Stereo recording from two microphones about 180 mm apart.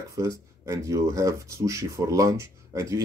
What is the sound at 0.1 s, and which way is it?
Speech, 15° right (ahead or behind).